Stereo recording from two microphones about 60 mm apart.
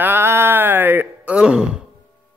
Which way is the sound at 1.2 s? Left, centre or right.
Centre.